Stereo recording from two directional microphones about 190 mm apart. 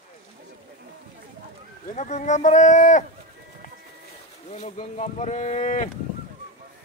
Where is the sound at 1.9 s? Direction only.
40° left (ahead or behind).